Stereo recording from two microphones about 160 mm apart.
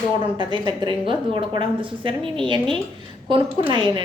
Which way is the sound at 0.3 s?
30° right (ahead or behind).